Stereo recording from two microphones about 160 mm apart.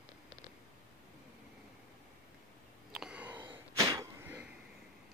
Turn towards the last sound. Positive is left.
turn(degrees=-10)  # may be behind; listen again after turning